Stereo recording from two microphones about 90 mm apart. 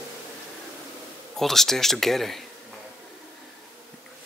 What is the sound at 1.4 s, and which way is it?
Speech, 5° left (ahead or behind).